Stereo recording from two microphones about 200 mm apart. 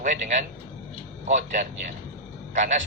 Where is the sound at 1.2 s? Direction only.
35° right (ahead or behind).